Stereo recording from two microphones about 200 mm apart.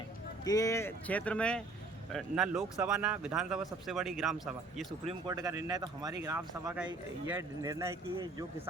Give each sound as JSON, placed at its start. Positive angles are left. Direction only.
{"t": 0.4, "sound": "a man's voice", "side_deg": 15}
{"t": 5.3, "sound": "speech", "side_deg": -15}